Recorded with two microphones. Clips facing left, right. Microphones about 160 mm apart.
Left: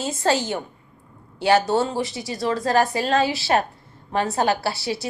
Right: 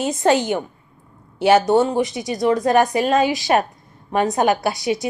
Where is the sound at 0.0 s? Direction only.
20° right (ahead or behind).